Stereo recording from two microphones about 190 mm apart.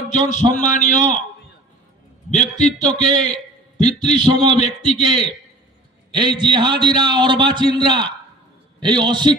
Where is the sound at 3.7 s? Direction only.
35° left (ahead or behind).